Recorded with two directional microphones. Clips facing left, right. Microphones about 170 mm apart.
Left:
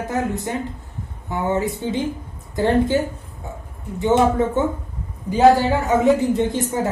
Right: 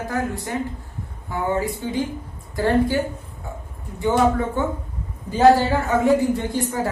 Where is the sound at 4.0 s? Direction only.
20° left (ahead or behind).